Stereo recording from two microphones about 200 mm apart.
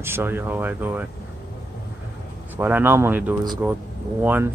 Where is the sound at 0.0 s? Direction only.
10° right (ahead or behind).